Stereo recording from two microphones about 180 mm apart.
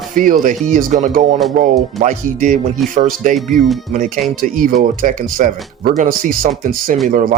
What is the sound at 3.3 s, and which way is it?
Speech, centre (ahead or behind).